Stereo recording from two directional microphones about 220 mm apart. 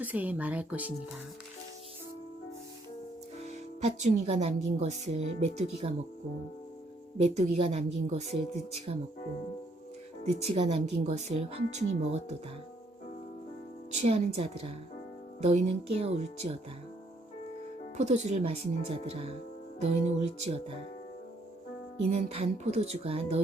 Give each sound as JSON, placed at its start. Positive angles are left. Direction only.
{"t": 0.0, "sound": "speech", "side_deg": -5}
{"t": 3.4, "sound": "speech", "side_deg": -30}
{"t": 7.3, "sound": "speech", "side_deg": -30}
{"t": 10.2, "sound": "speech", "side_deg": -25}
{"t": 13.9, "sound": "speech", "side_deg": -30}
{"t": 17.9, "sound": "speech", "side_deg": -30}
{"t": 22.1, "sound": "speech", "side_deg": -25}